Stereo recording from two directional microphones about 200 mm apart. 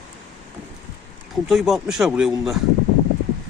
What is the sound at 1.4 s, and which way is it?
Speech, centre (ahead or behind).